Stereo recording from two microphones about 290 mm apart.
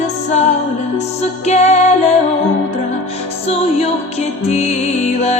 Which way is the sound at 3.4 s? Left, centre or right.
Left.